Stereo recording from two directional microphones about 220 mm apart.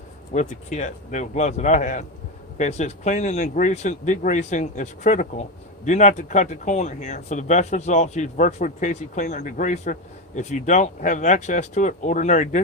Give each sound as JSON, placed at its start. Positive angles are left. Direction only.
{"t": 0.3, "sound": "speech", "side_deg": 35}